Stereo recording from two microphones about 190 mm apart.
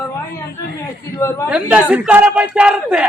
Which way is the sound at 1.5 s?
5° right (ahead or behind).